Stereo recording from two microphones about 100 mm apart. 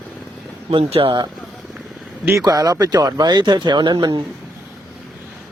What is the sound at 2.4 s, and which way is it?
Speech, 40° right (ahead or behind).